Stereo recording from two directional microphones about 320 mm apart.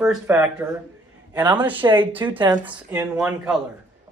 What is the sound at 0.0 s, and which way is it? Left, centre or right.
Speech, centre.